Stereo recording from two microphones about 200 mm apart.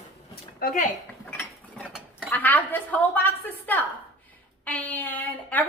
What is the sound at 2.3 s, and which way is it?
Speech, 10° left (ahead or behind).